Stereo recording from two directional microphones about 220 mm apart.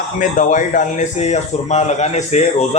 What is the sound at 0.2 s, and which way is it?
Speech, 35° left (ahead or behind).